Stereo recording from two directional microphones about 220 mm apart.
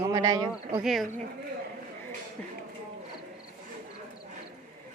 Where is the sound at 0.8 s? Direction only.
Centre (ahead or behind).